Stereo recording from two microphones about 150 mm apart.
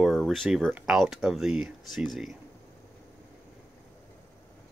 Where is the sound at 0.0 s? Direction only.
Centre (ahead or behind).